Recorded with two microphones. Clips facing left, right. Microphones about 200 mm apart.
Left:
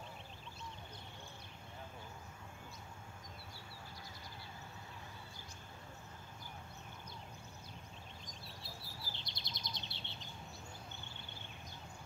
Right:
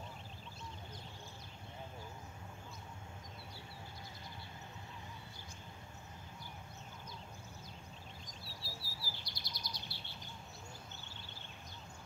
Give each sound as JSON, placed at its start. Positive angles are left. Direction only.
{"t": 8.6, "sound": "chirp", "side_deg": 20}